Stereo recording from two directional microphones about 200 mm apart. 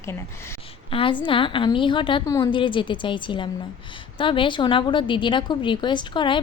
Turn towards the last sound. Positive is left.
turn(degrees=25)  # may be behind; listen again after turning